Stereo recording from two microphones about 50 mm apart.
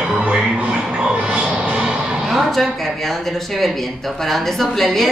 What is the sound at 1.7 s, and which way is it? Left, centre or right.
Music, centre.